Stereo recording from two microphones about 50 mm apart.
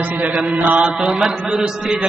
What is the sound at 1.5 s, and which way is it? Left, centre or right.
Speech, centre.